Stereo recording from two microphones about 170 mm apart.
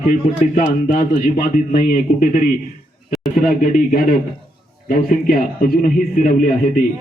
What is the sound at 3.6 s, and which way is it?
Speech, 55° left (ahead or behind).